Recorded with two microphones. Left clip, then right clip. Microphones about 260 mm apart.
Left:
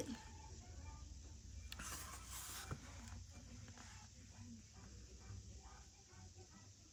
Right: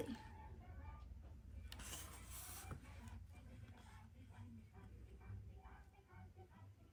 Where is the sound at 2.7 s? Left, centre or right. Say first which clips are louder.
Left 4 dB; left.